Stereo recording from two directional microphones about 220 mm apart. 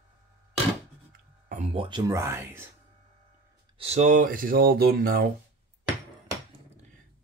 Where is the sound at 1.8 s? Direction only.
15° right (ahead or behind).